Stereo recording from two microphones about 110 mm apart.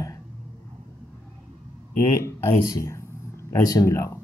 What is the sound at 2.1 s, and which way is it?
Speech, 30° left (ahead or behind).